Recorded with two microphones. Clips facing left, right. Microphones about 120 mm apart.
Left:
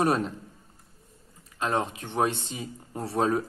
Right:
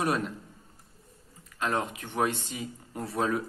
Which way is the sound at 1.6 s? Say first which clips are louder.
Left 2 dB; 25° left (ahead or behind).